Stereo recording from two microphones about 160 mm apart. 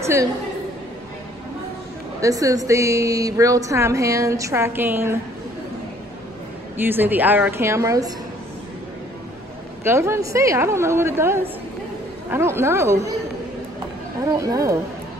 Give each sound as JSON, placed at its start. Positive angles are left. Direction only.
{"t": 0.0, "sound": "a woman's voice", "side_deg": -20}
{"t": 2.2, "sound": "a woman's voice", "side_deg": -20}
{"t": 6.8, "sound": "a woman's voice", "side_deg": -10}
{"t": 9.8, "sound": "a woman's voice", "side_deg": -15}
{"t": 14.3, "sound": "a woman's voice", "side_deg": -20}